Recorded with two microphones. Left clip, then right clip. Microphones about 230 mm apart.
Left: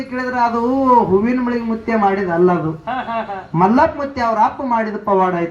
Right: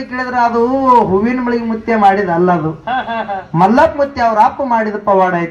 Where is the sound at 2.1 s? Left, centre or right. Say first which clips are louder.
Right 4 dB; right.